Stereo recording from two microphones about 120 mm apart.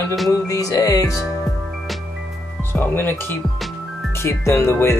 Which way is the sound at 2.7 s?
15° left (ahead or behind).